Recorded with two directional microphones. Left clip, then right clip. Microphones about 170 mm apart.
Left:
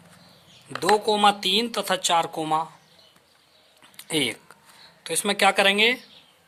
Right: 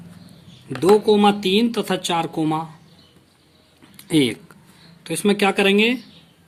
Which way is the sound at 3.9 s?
25° left (ahead or behind).